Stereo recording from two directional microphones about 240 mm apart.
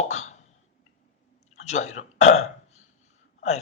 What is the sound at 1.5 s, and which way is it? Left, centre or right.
Speech, left.